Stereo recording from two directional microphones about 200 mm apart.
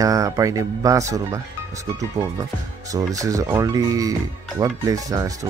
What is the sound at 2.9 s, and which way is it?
A man's voice, 15° right (ahead or behind).